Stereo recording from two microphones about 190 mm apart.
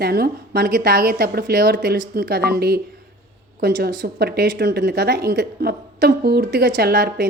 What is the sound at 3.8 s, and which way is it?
A woman's voice, 55° right (ahead or behind).